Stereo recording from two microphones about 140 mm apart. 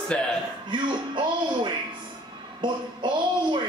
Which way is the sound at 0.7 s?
35° right (ahead or behind).